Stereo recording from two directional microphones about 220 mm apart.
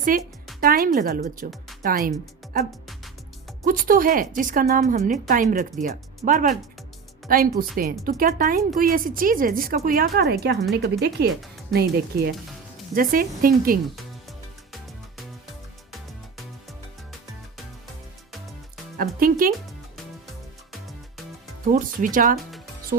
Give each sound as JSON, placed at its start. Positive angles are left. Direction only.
{"t": 0.1, "sound": "speech", "side_deg": -40}
{"t": 18.9, "sound": "speech", "side_deg": -40}
{"t": 21.7, "sound": "speech", "side_deg": -35}